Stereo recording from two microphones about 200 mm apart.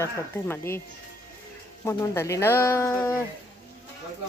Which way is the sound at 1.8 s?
15° left (ahead or behind).